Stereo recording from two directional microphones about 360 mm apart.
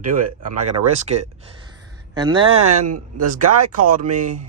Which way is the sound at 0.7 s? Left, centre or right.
Centre.